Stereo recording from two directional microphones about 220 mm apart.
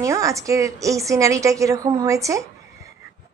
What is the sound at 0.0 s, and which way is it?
A woman's voice, 15° right (ahead or behind).